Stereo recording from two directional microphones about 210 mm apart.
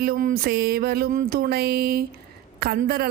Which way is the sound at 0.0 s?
40° right (ahead or behind).